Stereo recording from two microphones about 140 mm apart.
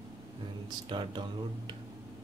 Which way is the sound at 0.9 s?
35° right (ahead or behind).